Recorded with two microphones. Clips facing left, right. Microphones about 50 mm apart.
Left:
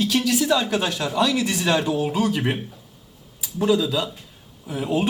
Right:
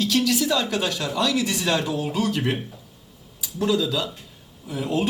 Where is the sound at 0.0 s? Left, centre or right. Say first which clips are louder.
Left 1 dB; centre.